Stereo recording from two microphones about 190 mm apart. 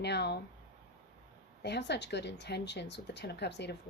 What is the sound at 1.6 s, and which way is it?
Speech, 65° left (ahead or behind).